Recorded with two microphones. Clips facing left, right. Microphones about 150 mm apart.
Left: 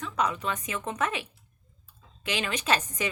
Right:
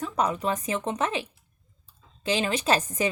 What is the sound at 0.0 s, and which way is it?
A woman's voice, 35° right (ahead or behind).